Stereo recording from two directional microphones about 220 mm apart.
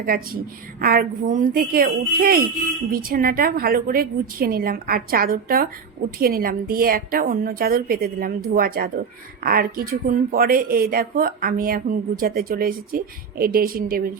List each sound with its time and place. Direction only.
0.1 s speech: 40° right (ahead or behind)